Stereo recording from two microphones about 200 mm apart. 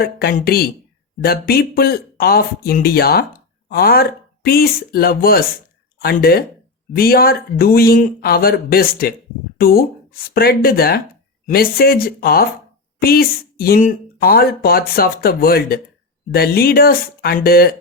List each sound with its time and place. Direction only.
0.0 s speech: 50° left (ahead or behind)